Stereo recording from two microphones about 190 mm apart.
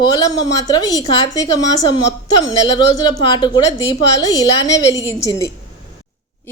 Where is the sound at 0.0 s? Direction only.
20° left (ahead or behind).